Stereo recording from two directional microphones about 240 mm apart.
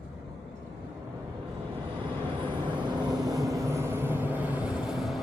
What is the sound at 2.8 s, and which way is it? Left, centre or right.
Vehicle, centre.